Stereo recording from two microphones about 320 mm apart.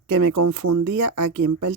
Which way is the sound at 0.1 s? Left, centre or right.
Right.